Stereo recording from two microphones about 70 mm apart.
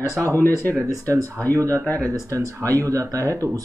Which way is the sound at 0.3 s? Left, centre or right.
Left.